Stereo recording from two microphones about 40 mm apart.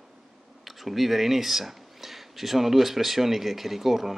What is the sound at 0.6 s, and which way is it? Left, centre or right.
Speech, centre.